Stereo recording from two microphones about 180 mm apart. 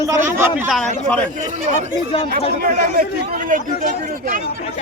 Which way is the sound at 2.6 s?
55° right (ahead or behind).